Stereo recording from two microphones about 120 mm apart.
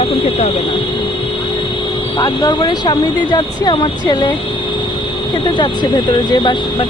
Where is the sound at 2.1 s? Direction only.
30° left (ahead or behind).